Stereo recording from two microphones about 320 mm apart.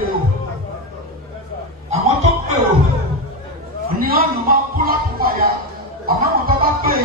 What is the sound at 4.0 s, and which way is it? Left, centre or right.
Music, right.